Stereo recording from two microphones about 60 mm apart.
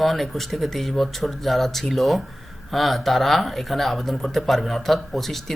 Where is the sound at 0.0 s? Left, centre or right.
Centre.